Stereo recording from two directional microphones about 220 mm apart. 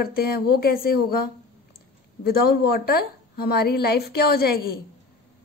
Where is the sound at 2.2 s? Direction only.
45° left (ahead or behind).